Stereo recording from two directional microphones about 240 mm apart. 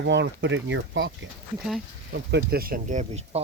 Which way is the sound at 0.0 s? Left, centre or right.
Right.